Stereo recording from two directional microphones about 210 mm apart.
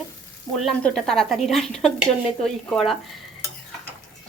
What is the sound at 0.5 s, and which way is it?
Dishes, centre (ahead or behind).